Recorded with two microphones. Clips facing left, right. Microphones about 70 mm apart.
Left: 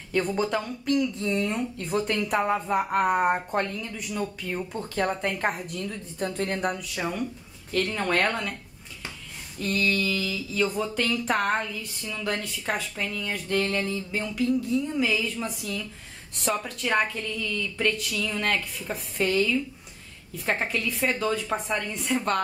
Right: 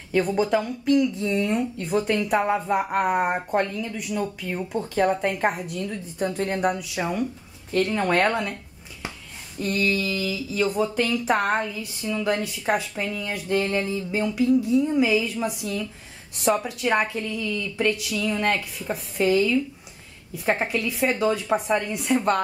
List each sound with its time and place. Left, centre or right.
0.1 s speech: centre
9.6 s speech: centre